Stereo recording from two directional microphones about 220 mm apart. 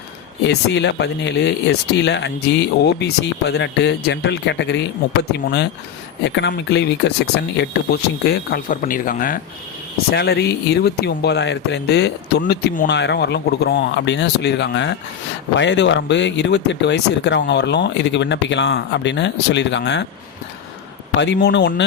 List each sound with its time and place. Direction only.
0.4 s speech: 50° left (ahead or behind)
21.2 s speech: 50° left (ahead or behind)